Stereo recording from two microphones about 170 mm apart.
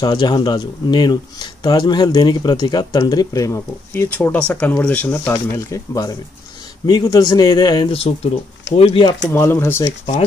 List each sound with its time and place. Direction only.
0.0 s speech: 25° left (ahead or behind)
9.3 s speech: 15° left (ahead or behind)